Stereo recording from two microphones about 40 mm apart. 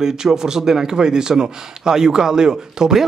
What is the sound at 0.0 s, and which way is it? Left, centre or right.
Speech, centre.